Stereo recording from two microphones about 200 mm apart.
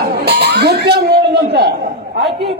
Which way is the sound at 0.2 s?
55° right (ahead or behind).